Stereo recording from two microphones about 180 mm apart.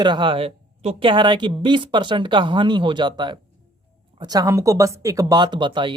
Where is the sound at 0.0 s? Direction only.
25° right (ahead or behind).